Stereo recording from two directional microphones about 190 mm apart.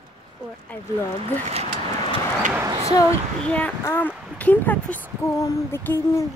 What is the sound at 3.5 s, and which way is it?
Speech, 10° left (ahead or behind).